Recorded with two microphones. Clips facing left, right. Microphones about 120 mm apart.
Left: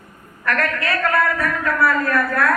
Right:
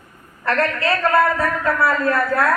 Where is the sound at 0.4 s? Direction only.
30° right (ahead or behind).